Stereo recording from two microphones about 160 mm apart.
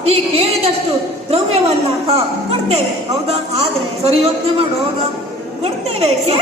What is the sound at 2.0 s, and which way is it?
Speech, 40° right (ahead or behind).